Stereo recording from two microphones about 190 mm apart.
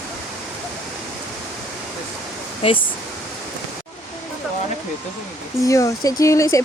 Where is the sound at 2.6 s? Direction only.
25° left (ahead or behind).